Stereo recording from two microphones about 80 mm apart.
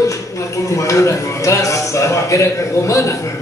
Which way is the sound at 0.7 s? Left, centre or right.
Left.